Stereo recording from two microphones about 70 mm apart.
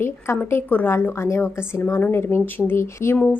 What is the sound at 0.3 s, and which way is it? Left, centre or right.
A woman's voice, left.